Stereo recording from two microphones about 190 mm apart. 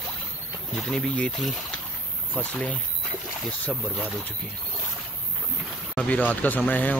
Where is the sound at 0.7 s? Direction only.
5° left (ahead or behind).